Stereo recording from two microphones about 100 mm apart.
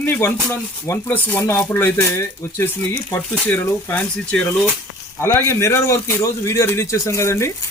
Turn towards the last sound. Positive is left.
turn(degrees=25)  # may be behind; listen again after turning